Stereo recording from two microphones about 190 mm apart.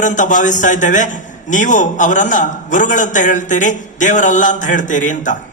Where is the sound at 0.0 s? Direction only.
40° left (ahead or behind).